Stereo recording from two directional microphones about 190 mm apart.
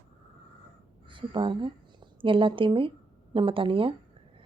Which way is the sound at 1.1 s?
25° right (ahead or behind).